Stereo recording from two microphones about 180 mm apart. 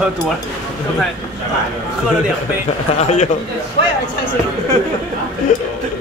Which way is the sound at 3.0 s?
40° left (ahead or behind).